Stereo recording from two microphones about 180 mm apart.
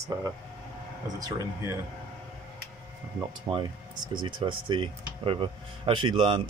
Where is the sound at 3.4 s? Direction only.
25° right (ahead or behind).